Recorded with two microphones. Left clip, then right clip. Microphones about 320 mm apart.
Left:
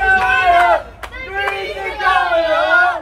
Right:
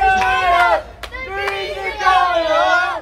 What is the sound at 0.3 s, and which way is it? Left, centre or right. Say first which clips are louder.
Sheep: left 2 dB; right.